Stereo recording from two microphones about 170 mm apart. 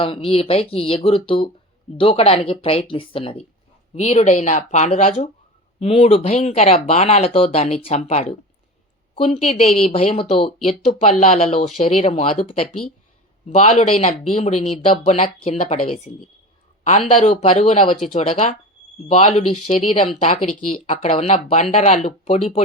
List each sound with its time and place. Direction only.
0.0 s speech: 35° left (ahead or behind)